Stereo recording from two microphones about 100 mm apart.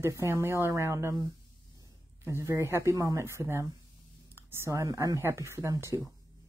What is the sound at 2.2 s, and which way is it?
Speech, 30° right (ahead or behind).